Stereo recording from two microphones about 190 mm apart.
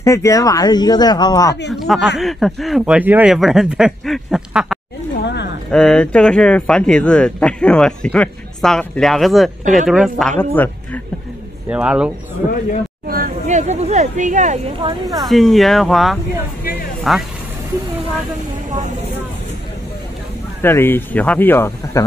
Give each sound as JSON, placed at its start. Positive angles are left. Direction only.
{"t": 0.0, "sound": "speech", "side_deg": 15}
{"t": 1.7, "sound": "speech", "side_deg": 0}
{"t": 5.2, "sound": "a woman's voice", "side_deg": 65}
{"t": 5.7, "sound": "speech", "side_deg": 5}
{"t": 11.7, "sound": "speech", "side_deg": -5}
{"t": 13.1, "sound": "speech", "side_deg": -45}
{"t": 14.8, "sound": "speech", "side_deg": -20}
{"t": 15.2, "sound": "speech", "side_deg": 0}
{"t": 20.6, "sound": "speech", "side_deg": 10}